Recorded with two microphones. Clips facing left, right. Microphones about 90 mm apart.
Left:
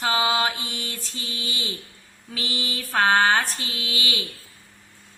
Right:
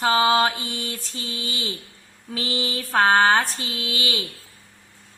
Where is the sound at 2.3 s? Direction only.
30° right (ahead or behind).